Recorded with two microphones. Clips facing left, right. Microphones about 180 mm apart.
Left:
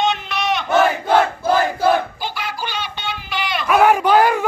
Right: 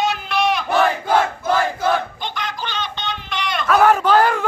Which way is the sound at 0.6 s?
25° left (ahead or behind).